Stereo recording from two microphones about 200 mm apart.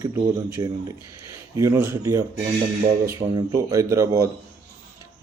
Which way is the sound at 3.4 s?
15° right (ahead or behind).